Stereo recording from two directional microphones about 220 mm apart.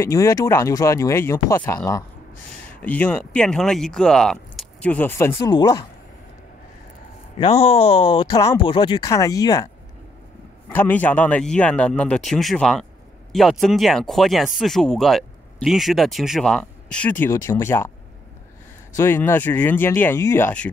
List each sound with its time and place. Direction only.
0.0 s speech: 15° left (ahead or behind)
2.8 s speech: 5° left (ahead or behind)
7.3 s speech: 30° left (ahead or behind)
10.7 s speech: 10° left (ahead or behind)
18.9 s speech: 10° left (ahead or behind)